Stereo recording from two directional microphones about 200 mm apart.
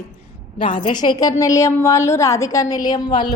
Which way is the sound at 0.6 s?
20° left (ahead or behind).